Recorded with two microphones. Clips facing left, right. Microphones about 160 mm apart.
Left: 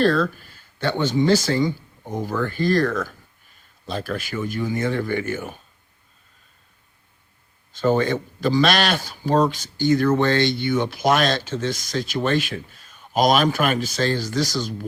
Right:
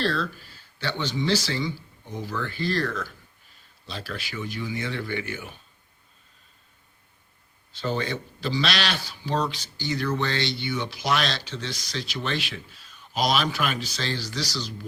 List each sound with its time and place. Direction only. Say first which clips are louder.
0.0 s a man's voice: left 8 dB; 50° left (ahead or behind)
7.7 s a man's voice: left 9 dB; 50° left (ahead or behind)